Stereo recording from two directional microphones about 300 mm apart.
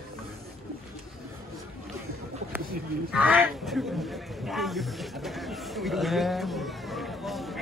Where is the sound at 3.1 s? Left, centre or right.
Centre.